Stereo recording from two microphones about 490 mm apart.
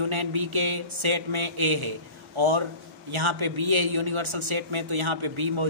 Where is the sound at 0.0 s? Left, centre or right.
Right.